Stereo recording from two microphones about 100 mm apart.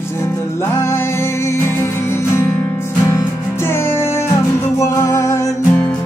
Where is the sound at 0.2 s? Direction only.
25° left (ahead or behind).